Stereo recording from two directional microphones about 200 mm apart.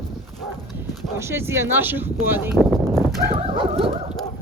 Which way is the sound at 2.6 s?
Centre (ahead or behind).